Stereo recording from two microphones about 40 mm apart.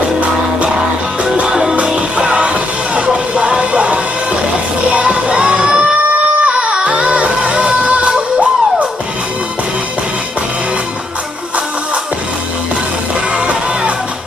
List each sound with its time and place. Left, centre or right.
1.5 s music: centre; by 8.1 s right